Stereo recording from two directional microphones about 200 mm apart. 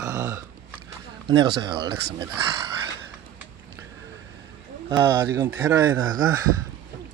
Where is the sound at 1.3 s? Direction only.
20° right (ahead or behind).